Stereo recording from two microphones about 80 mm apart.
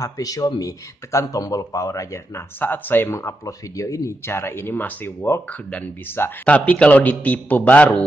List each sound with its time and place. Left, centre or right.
0.0 s speech: left
2.6 s speech: left